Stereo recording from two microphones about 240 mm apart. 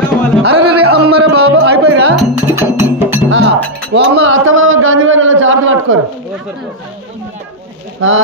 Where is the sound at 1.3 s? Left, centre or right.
Right.